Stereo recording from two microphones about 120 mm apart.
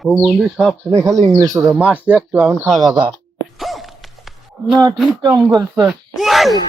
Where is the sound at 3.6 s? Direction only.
Centre (ahead or behind).